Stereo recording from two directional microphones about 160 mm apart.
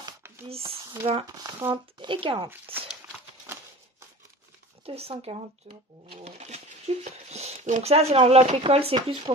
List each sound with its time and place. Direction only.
0.5 s speech: 35° right (ahead or behind)
0.7 s a sound: 15° right (ahead or behind)
1.3 s speech: 25° right (ahead or behind)
4.8 s speech: 40° right (ahead or behind)